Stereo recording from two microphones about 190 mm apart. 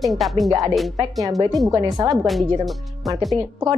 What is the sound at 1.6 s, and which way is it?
Speech, 20° right (ahead or behind).